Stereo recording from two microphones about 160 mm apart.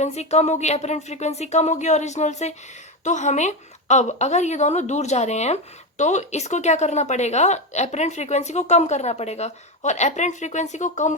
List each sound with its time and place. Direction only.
0.0 s a woman's voice: 45° left (ahead or behind)